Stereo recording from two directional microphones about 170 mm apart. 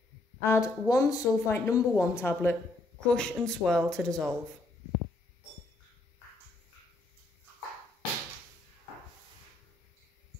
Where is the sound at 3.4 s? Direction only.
5° left (ahead or behind).